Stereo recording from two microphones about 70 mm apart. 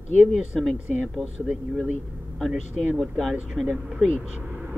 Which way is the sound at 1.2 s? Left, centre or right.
Centre.